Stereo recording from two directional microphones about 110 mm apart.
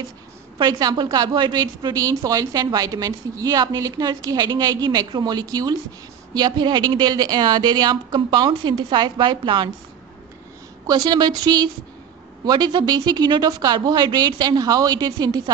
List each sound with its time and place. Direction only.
0.6 s a woman's voice: 35° right (ahead or behind)
10.9 s a woman's voice: 40° right (ahead or behind)